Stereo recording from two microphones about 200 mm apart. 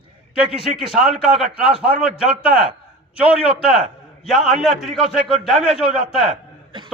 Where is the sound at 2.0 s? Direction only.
5° right (ahead or behind).